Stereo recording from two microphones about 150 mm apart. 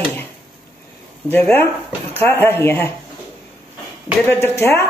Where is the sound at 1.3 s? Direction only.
15° left (ahead or behind).